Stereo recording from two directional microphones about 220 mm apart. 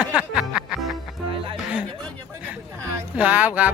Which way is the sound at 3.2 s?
5° right (ahead or behind).